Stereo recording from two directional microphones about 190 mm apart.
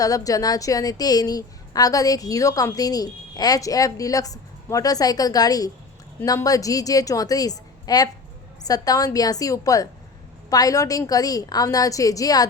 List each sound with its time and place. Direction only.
0.0 s a woman's voice: 20° left (ahead or behind)